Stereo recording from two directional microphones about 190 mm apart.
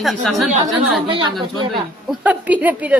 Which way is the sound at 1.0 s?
25° right (ahead or behind).